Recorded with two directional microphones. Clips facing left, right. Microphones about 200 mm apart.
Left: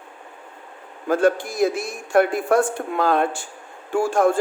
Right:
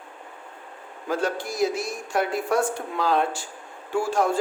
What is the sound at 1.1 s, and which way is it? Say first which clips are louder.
A man's voice: left 7 dB; 55° left (ahead or behind).